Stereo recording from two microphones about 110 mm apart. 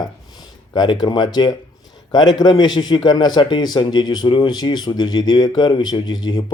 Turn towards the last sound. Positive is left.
turn(degrees=40)  # may be behind; listen again after turning